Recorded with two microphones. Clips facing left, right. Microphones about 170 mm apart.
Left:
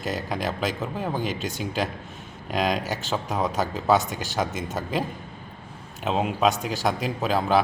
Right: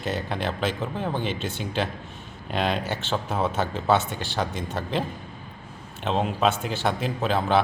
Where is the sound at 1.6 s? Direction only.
5° left (ahead or behind).